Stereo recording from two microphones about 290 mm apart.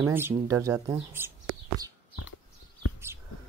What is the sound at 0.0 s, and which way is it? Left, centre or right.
Speech, centre.